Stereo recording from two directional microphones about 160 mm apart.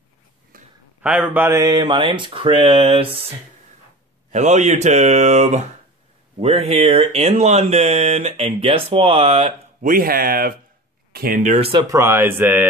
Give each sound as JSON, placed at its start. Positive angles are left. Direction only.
{"t": 0.5, "sound": "a sound", "side_deg": -65}
{"t": 1.0, "sound": "speech", "side_deg": -5}
{"t": 4.3, "sound": "speech", "side_deg": -45}
{"t": 9.8, "sound": "speech", "side_deg": -60}
{"t": 11.5, "sound": "speech", "side_deg": -35}
{"t": 11.8, "sound": "speech", "side_deg": -20}